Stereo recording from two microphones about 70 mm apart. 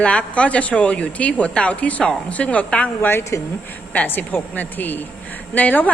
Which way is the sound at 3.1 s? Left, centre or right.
Left.